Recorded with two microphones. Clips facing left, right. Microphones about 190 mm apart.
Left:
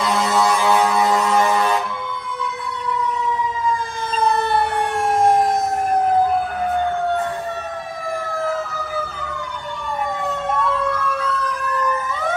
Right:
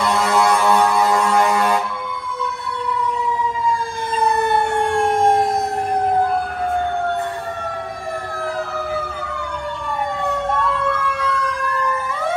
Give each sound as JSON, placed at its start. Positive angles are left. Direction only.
{"t": 0.0, "sound": "vehicle", "side_deg": 0}
{"t": 4.7, "sound": "fire engine", "side_deg": -55}